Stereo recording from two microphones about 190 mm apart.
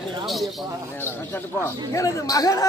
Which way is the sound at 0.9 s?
10° left (ahead or behind).